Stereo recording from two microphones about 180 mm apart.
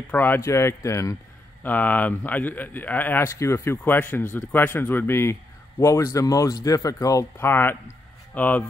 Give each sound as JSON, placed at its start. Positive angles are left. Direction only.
{"t": 0.1, "sound": "speech", "side_deg": 10}